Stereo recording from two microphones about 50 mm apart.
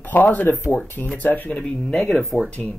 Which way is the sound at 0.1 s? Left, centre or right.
Left.